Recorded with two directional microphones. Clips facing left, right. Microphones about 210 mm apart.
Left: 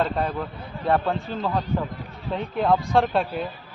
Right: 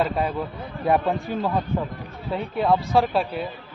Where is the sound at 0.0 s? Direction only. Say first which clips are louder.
Right 1 dB; 5° right (ahead or behind).